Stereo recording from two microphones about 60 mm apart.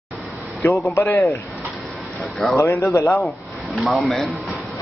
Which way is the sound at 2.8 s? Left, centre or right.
Left.